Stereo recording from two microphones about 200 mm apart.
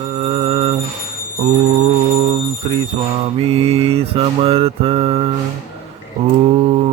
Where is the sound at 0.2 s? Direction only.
30° right (ahead or behind).